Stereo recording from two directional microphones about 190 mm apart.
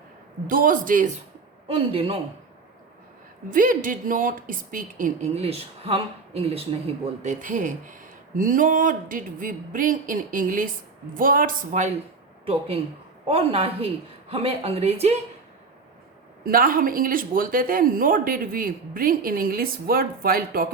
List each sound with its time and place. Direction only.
0.4 s a woman's voice: 45° right (ahead or behind)
1.6 s a man's voice: 30° right (ahead or behind)
3.5 s a woman's voice: 45° right (ahead or behind)
12.5 s a woman's voice: 30° right (ahead or behind)
16.4 s a woman's voice: 50° right (ahead or behind)